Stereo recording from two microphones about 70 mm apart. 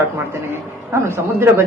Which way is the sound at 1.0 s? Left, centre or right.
Right.